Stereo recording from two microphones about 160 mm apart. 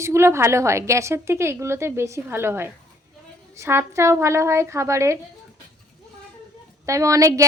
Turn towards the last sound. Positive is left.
turn(degrees=-20)  # may be behind; listen again after turning